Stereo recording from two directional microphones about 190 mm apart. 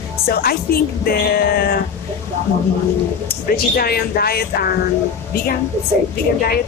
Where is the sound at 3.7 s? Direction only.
55° left (ahead or behind).